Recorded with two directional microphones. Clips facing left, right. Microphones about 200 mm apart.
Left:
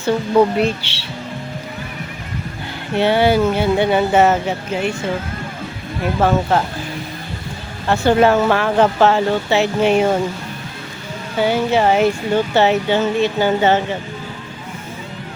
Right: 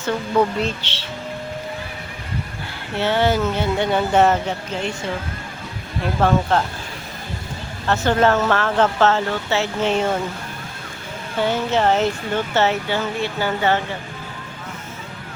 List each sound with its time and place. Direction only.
0.6 s speech: 10° left (ahead or behind)
2.9 s speech: 15° left (ahead or behind)
6.1 s speech: 5° left (ahead or behind)
7.9 s speech: 10° left (ahead or behind)
11.3 s speech: 10° left (ahead or behind)